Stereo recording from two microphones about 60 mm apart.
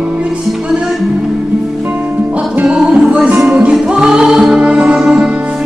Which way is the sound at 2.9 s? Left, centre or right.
Centre.